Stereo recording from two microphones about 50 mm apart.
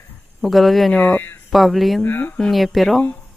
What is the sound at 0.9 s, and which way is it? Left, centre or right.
Speech, left.